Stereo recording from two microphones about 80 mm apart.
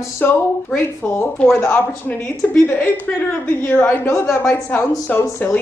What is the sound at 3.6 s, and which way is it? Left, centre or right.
Speech, left.